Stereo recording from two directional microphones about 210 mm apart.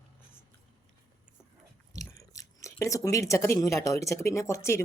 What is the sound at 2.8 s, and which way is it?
A woman's voice, 15° left (ahead or behind).